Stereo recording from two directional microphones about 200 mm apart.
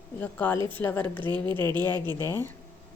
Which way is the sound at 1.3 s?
25° right (ahead or behind).